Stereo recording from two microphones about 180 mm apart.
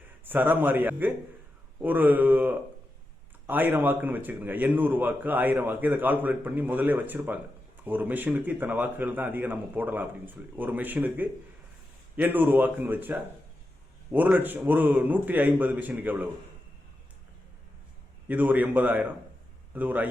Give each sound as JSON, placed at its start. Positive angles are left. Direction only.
{"t": 0.3, "sound": "a man's voice", "side_deg": -10}
{"t": 18.3, "sound": "a man's voice", "side_deg": -10}